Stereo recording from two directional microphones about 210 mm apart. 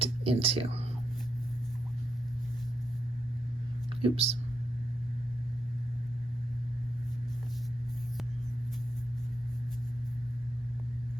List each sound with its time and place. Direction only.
0.0 s speech: 25° right (ahead or behind)
4.0 s speech: 30° right (ahead or behind)